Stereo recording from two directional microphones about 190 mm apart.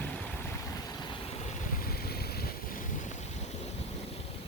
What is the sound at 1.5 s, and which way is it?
Boat, 50° left (ahead or behind).